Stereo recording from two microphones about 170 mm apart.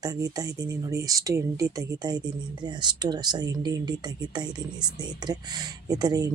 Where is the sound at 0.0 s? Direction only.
20° right (ahead or behind).